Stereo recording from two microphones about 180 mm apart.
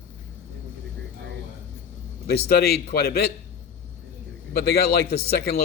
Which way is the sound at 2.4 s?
60° left (ahead or behind).